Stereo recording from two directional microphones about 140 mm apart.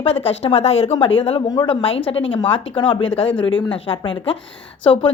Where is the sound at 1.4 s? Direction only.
25° left (ahead or behind).